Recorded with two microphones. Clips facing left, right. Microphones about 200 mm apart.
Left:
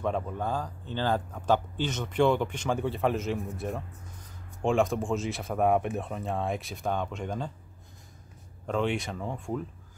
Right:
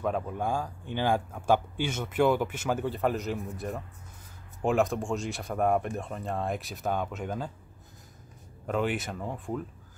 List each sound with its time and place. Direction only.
0.0 s speech: 5° right (ahead or behind)
8.6 s speech: 5° right (ahead or behind)